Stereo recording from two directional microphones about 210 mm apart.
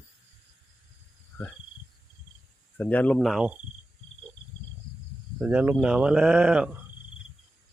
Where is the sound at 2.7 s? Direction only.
5° left (ahead or behind).